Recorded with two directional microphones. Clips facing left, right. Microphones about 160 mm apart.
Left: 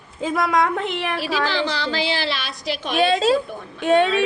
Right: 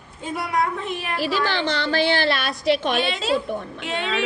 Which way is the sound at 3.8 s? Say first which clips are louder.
Left 12 dB; 50° left (ahead or behind).